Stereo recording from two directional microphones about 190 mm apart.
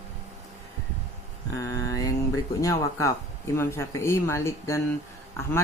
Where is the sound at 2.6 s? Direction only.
15° left (ahead or behind).